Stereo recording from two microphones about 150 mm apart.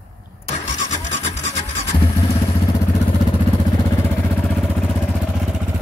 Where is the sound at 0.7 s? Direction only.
55° left (ahead or behind).